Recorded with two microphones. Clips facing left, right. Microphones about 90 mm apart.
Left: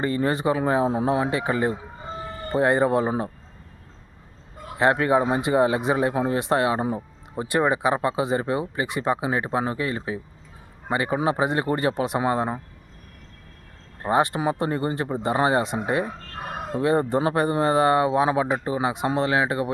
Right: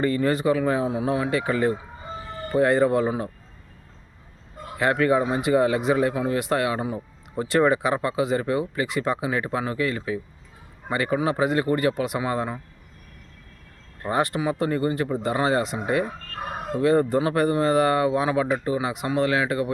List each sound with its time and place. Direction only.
0.0 s speech: 25° left (ahead or behind)
4.8 s speech: 25° left (ahead or behind)
7.3 s speech: 20° left (ahead or behind)
14.0 s speech: 20° left (ahead or behind)